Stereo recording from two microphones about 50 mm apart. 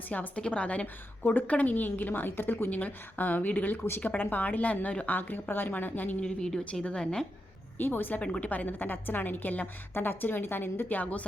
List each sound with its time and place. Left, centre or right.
0.1 s a woman's voice: left
1.2 s a woman's voice: left
2.6 s a woman's voice: left
6.2 s a woman's voice: centre
7.8 s speech: left
8.2 s a woman's voice: left